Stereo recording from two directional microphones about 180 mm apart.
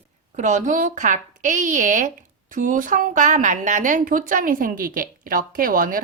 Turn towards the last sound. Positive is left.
turn(degrees=-50)  # may be behind; listen again after turning